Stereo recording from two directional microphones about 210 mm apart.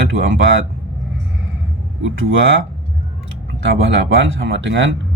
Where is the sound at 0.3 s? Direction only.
60° right (ahead or behind).